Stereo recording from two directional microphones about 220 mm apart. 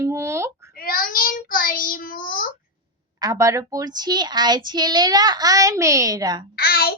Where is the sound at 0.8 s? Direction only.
40° left (ahead or behind).